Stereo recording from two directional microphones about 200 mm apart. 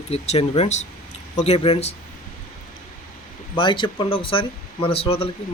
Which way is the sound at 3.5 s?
25° left (ahead or behind).